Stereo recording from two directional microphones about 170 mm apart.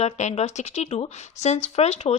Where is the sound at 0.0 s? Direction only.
40° left (ahead or behind).